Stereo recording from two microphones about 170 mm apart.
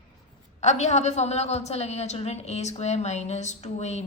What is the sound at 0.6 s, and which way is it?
A woman's voice, 40° left (ahead or behind).